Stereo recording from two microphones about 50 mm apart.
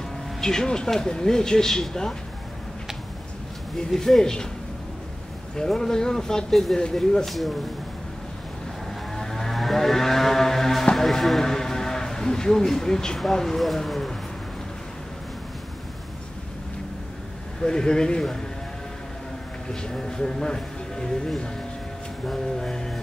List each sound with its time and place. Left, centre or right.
0.4 s speech: centre
3.7 s speech: centre
5.7 s speech: centre
7.2 s speech: centre
9.1 s vehicle: centre
13.2 s speech: centre
17.6 s speech: centre
19.7 s speech: centre
22.3 s speech: centre